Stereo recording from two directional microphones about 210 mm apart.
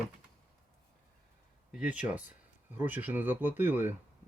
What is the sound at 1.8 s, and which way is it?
Speech, 5° right (ahead or behind).